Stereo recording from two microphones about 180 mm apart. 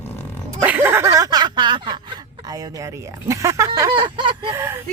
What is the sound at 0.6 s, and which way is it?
Speech, 10° right (ahead or behind).